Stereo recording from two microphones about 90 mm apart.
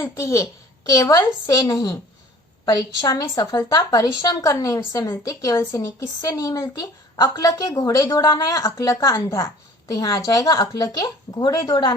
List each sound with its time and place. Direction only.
0.0 s a woman's voice: 35° left (ahead or behind); by 11.9 s 55° left (ahead or behind)